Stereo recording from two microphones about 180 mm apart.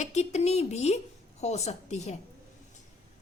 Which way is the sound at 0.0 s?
40° left (ahead or behind).